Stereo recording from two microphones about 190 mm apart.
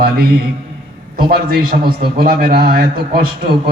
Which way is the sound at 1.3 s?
55° right (ahead or behind).